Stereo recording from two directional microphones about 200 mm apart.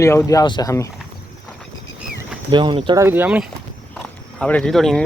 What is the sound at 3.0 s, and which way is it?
Speech, 10° right (ahead or behind).